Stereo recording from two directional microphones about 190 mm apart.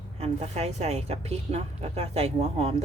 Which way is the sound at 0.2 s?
35° right (ahead or behind).